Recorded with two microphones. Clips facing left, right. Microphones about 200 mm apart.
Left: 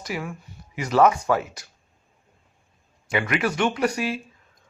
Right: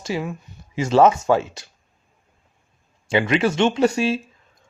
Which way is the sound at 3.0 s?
25° right (ahead or behind).